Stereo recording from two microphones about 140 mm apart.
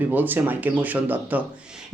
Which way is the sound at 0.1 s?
15° right (ahead or behind).